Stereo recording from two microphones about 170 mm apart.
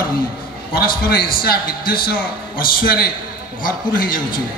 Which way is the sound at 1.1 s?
60° left (ahead or behind).